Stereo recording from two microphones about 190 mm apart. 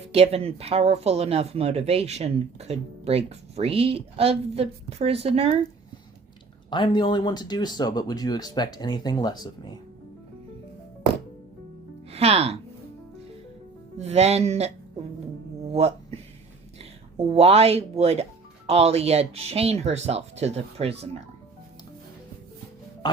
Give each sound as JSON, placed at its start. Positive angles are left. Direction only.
{"t": 0.1, "sound": "speech", "side_deg": -35}
{"t": 6.7, "sound": "speech", "side_deg": 25}
{"t": 12.1, "sound": "speech", "side_deg": -30}
{"t": 14.0, "sound": "speech", "side_deg": -35}
{"t": 15.7, "sound": "speech", "side_deg": -35}